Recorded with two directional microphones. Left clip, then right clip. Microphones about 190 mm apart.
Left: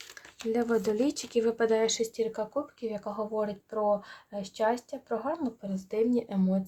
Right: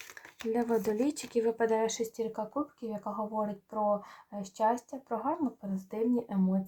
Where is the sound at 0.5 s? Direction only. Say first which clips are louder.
Left 2 dB; 15° left (ahead or behind); by 1.9 s 30° left (ahead or behind).